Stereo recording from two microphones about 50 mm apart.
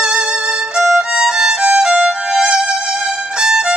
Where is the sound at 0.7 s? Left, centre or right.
Centre.